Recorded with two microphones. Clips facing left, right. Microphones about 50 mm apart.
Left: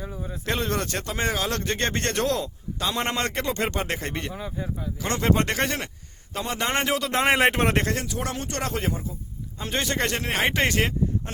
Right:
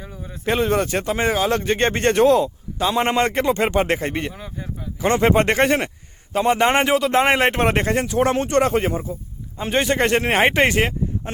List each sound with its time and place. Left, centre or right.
0.3 s speech: centre
4.9 s speech: right
7.1 s a man's voice: centre
7.8 s speech: right
8.0 s speech: right